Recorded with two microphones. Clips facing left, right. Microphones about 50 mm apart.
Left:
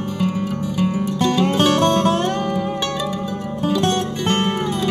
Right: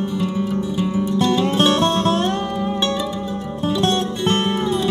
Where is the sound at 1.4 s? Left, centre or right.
Left.